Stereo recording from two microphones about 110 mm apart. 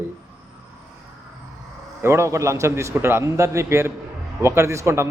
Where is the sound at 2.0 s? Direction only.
25° right (ahead or behind).